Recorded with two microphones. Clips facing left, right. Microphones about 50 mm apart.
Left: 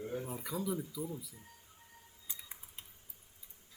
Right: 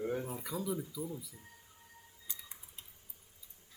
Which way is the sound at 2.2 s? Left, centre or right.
Left.